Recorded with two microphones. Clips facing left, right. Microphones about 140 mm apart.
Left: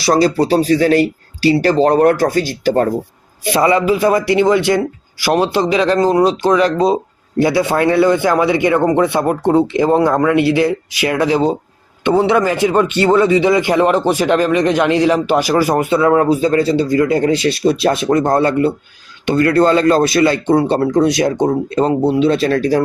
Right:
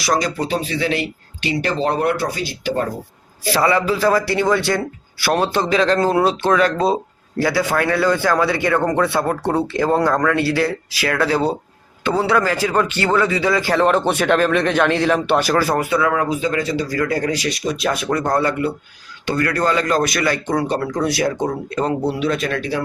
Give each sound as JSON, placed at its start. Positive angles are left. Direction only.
{"t": 0.0, "sound": "speech", "side_deg": 30}
{"t": 3.4, "sound": "a man's voice", "side_deg": 20}
{"t": 6.1, "sound": "speech", "side_deg": -5}
{"t": 6.9, "sound": "a man's voice", "side_deg": 20}